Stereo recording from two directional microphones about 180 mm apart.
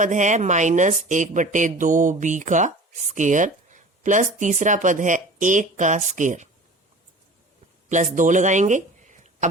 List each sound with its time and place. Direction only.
0.0 s speech: 45° right (ahead or behind)
7.9 s speech: 45° right (ahead or behind)